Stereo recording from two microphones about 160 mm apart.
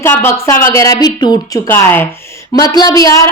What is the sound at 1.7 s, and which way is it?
Speech, 10° left (ahead or behind).